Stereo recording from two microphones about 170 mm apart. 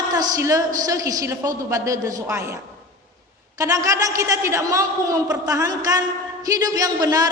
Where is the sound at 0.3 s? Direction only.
20° right (ahead or behind).